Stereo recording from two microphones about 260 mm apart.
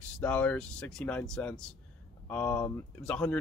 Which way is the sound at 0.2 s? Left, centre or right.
Centre.